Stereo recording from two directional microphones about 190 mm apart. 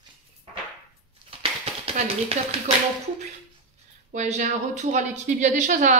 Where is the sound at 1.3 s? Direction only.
30° right (ahead or behind).